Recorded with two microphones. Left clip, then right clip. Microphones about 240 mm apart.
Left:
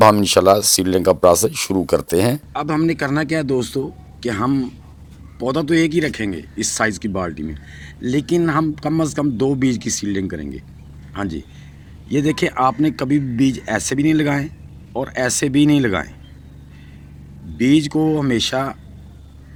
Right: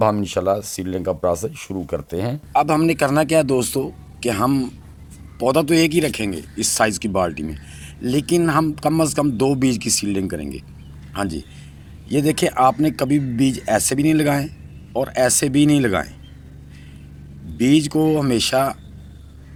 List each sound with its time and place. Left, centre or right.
0.0 s speech: centre
2.5 s a man's voice: centre
17.6 s speech: centre